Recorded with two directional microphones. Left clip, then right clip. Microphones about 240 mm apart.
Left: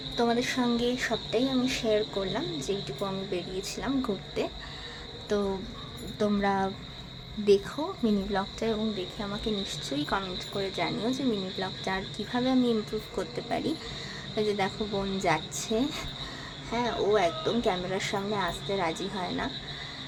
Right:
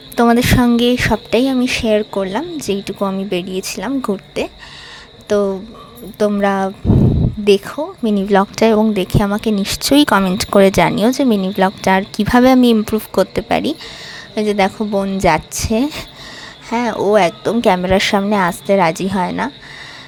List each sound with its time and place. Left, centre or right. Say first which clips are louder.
0.2 s a woman's voice: right 15 dB; right